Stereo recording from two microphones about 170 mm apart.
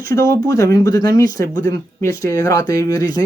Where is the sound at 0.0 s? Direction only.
20° left (ahead or behind).